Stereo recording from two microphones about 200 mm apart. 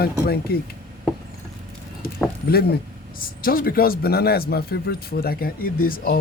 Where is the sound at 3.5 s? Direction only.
45° left (ahead or behind).